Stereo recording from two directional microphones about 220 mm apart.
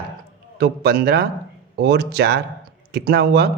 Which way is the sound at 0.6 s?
45° right (ahead or behind).